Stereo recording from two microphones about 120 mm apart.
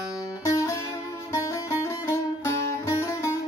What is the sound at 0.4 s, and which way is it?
Music, 25° left (ahead or behind).